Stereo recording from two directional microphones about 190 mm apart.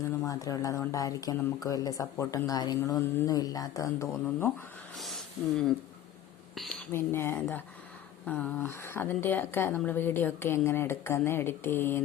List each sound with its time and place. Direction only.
0.3 s speech: 20° left (ahead or behind)
4.9 s speech: centre (ahead or behind)
6.9 s speech: 10° left (ahead or behind)